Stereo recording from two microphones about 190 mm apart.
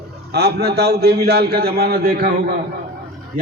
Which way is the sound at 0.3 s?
60° right (ahead or behind).